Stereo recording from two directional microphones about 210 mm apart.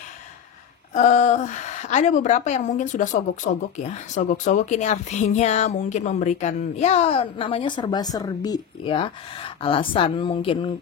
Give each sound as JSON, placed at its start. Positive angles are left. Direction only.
{"t": 0.9, "sound": "a woman's voice", "side_deg": 35}